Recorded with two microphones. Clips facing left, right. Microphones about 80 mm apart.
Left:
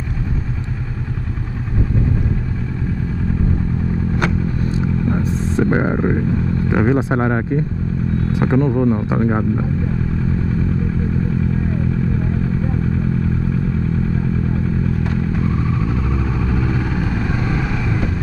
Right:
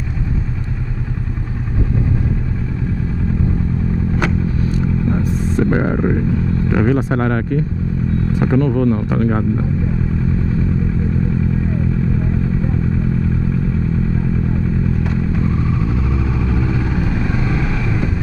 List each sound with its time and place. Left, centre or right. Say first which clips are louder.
5.2 s speech: right 1 dB; centre
16.0 s vehicle: right 1 dB; centre